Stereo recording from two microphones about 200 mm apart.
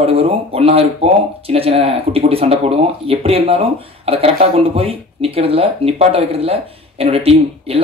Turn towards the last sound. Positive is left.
turn(degrees=-30)  # may be behind; listen again after turning